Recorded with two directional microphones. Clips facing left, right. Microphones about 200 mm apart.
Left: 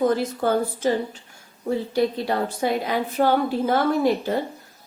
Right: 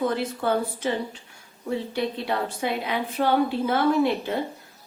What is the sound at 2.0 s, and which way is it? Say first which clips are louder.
A woman's voice: left 6 dB; 40° left (ahead or behind).